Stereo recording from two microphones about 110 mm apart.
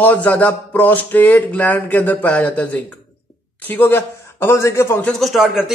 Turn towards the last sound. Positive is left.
turn(degrees=-5)  # may be behind; listen again after turning